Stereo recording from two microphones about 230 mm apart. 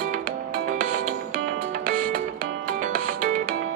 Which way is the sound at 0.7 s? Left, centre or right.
Right.